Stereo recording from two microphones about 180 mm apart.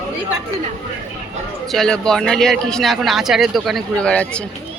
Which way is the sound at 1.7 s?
5° left (ahead or behind).